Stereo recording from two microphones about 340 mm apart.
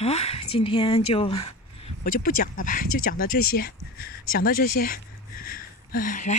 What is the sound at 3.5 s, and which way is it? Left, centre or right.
Speech, left.